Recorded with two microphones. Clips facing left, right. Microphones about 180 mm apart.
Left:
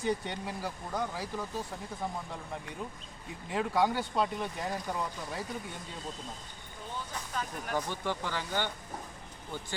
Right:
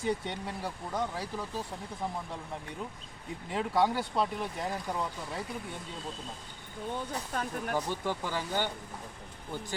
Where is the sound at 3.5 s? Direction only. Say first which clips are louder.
Even; centre (ahead or behind).